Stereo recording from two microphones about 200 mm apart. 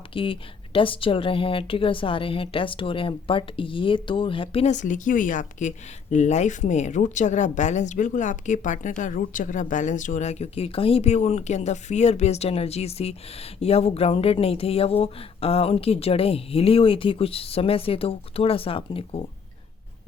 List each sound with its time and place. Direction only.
0.1 s a woman's voice: 25° left (ahead or behind)